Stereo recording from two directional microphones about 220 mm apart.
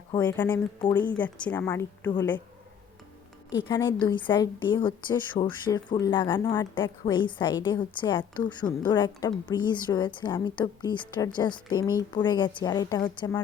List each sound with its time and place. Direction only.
0.2 s speech: 10° left (ahead or behind)
3.6 s a woman's voice: 20° left (ahead or behind)